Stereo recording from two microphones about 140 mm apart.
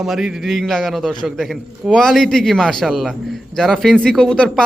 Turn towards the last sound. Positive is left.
turn(degrees=5)  # may be behind; listen again after turning